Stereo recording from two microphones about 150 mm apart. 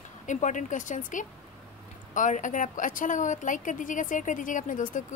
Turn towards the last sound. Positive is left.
turn(degrees=60)  # may be behind; listen again after turning